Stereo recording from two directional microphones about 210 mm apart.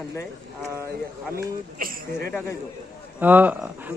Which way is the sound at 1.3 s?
45° right (ahead or behind).